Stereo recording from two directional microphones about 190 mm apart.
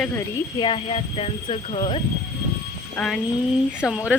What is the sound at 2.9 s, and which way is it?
A woman's voice, centre (ahead or behind).